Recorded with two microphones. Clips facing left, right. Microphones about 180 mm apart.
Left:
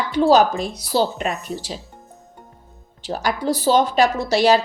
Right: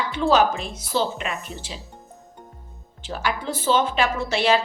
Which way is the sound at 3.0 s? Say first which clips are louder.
Left 5 dB; 40° left (ahead or behind).